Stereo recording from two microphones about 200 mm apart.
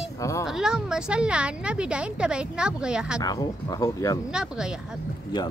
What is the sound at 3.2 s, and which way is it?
Speech, 20° left (ahead or behind).